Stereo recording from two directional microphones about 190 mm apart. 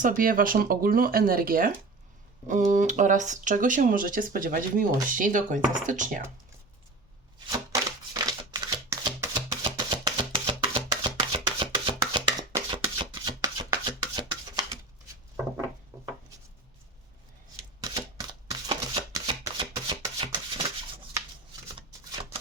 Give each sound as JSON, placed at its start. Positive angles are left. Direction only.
{"t": 0.0, "sound": "speech", "side_deg": -45}
{"t": 7.3, "sound": "chopping", "side_deg": -20}
{"t": 9.5, "sound": "music", "side_deg": -25}
{"t": 12.1, "sound": "chopping", "side_deg": -20}
{"t": 14.2, "sound": "a sound", "side_deg": -20}
{"t": 17.7, "sound": "chopping", "side_deg": -20}
{"t": 21.8, "sound": "shuffling cards", "side_deg": -25}